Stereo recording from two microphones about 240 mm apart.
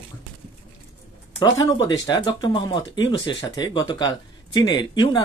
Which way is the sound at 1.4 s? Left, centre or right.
Centre.